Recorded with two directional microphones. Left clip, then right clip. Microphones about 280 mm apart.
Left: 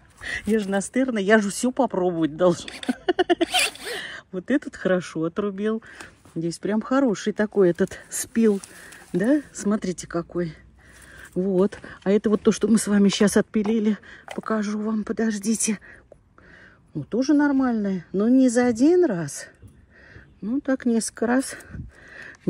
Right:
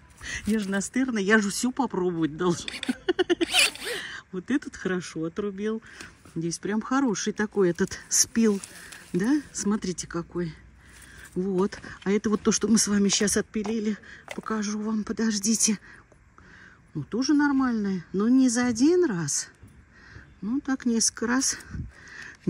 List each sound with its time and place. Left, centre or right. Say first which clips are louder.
0.3 s speech: left 5 dB; centre
2.5 s a sound: left 2 dB; centre
4.9 s speech: left 7 dB; centre
11.5 s speech: left 5 dB; centre
17.1 s speech: left 3 dB; centre
20.6 s speech: left 3 dB; centre